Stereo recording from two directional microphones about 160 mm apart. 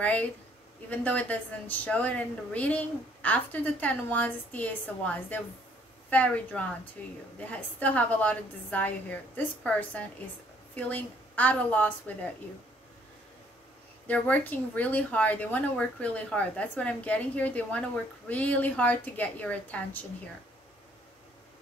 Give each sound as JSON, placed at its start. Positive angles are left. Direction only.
{"t": 0.0, "sound": "speech", "side_deg": 10}
{"t": 14.0, "sound": "speech", "side_deg": 10}